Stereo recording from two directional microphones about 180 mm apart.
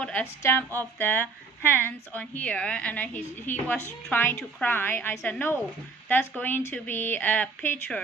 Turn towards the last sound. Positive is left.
turn(degrees=10)  # may be behind; listen again after turning